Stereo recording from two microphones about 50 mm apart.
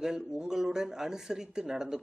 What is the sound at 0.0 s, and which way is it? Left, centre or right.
Speech, centre.